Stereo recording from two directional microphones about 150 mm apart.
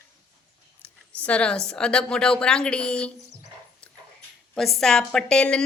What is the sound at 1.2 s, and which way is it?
A woman's voice, 5° left (ahead or behind).